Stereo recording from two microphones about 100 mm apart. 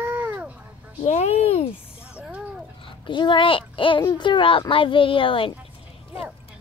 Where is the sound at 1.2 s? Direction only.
90° left.